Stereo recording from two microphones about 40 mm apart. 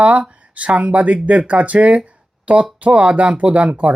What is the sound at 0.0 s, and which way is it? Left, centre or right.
Speech, right.